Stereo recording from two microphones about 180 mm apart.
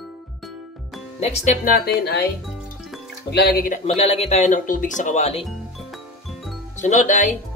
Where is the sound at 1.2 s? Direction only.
40° left (ahead or behind).